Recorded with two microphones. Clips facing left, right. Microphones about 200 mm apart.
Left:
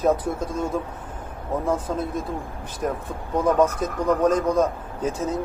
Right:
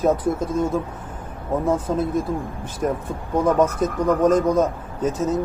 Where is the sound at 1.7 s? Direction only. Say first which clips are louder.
Right 3 dB; 25° right (ahead or behind).